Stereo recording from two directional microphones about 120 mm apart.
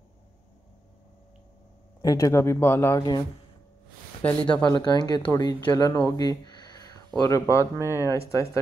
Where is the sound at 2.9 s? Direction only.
40° left (ahead or behind).